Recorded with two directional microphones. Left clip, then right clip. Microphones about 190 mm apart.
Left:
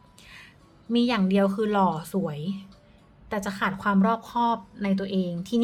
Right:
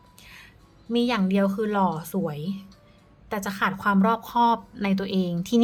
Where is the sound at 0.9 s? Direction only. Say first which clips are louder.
Even; centre (ahead or behind).